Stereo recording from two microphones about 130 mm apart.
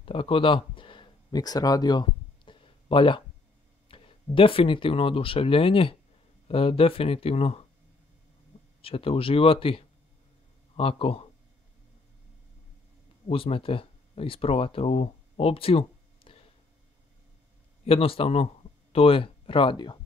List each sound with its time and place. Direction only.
0.0 s a sound: 45° left (ahead or behind)
3.9 s speech: 45° left (ahead or behind)
8.8 s speech: 45° left (ahead or behind)
13.3 s speech: 45° left (ahead or behind)
17.8 s speech: 45° left (ahead or behind)